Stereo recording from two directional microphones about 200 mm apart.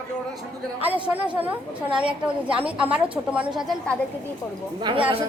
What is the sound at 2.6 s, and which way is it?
A woman's voice, 5° right (ahead or behind).